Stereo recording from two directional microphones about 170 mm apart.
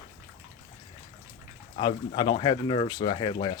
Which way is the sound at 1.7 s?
30° left (ahead or behind).